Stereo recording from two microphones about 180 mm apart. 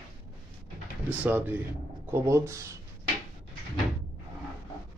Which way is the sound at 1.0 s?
10° right (ahead or behind).